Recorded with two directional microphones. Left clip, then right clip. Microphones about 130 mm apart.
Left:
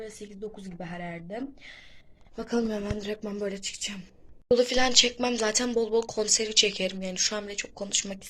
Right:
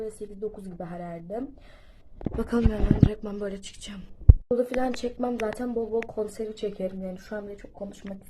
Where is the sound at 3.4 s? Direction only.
15° left (ahead or behind).